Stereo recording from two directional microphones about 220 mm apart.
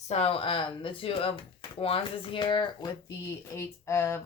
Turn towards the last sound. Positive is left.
turn(degrees=10)  # may be behind; listen again after turning